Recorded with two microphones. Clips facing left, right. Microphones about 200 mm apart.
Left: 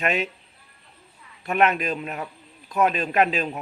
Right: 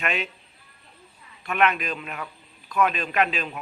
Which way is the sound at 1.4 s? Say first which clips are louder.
Left 2 dB; 40° left (ahead or behind).